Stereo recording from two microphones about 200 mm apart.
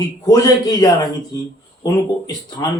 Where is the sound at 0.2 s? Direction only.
20° left (ahead or behind).